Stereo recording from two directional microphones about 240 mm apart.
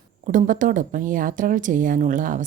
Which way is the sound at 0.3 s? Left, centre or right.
Right.